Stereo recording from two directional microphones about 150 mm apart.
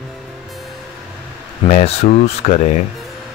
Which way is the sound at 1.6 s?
45° left (ahead or behind).